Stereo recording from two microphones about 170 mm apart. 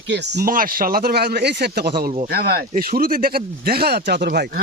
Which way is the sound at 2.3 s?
60° right (ahead or behind).